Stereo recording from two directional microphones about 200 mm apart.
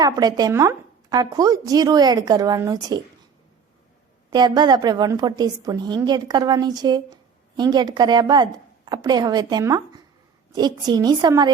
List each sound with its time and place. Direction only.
0.0 s a woman's voice: 20° right (ahead or behind)
4.3 s a woman's voice: 20° right (ahead or behind)